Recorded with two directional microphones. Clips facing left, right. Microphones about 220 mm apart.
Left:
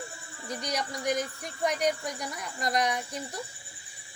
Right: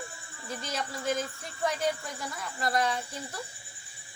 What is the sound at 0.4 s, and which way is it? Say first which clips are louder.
Speech: left 2 dB; 15° left (ahead or behind).